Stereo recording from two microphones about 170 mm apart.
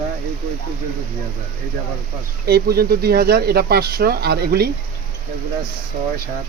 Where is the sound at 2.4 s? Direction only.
65° right (ahead or behind).